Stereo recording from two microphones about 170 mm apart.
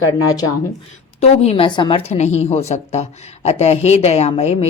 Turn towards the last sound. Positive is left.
turn(degrees=40)  # may be behind; listen again after turning